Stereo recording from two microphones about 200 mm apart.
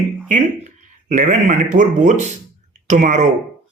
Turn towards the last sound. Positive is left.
turn(degrees=-40)  # may be behind; listen again after turning